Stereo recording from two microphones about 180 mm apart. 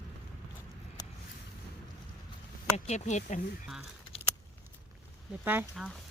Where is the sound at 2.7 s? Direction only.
40° left (ahead or behind).